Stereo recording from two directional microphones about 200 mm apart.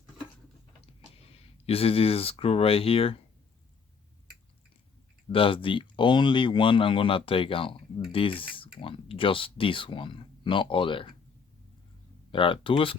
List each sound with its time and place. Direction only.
1.6 s speech: 30° left (ahead or behind)
5.3 s speech: 25° left (ahead or behind)
12.3 s speech: 25° left (ahead or behind)